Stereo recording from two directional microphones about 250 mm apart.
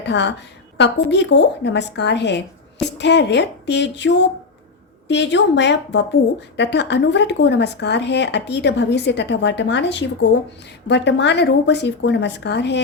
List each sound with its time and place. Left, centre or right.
0.0 s speech: left